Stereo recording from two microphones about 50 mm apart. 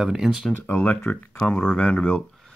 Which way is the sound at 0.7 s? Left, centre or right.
Left.